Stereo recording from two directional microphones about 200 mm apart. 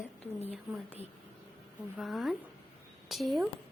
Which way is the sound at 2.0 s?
Centre (ahead or behind).